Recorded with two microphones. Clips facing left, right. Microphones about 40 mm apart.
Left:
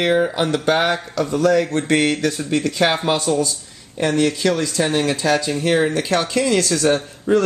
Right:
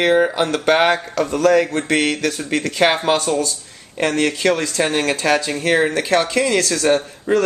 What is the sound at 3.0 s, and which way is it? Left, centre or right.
Speech, centre.